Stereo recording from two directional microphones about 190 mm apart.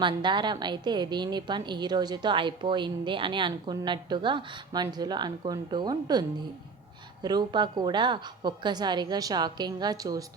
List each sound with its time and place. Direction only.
0.0 s a woman's voice: 25° right (ahead or behind)